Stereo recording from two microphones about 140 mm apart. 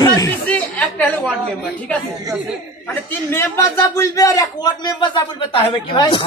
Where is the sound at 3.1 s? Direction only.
15° left (ahead or behind); by 6.2 s 35° left (ahead or behind).